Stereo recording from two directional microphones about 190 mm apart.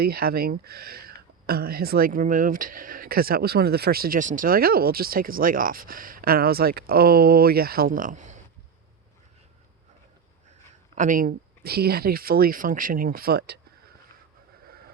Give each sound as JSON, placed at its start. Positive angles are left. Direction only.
{"t": 0.0, "sound": "speech", "side_deg": -55}
{"t": 10.9, "sound": "speech", "side_deg": -45}